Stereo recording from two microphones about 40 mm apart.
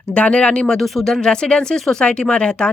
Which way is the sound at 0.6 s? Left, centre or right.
Centre.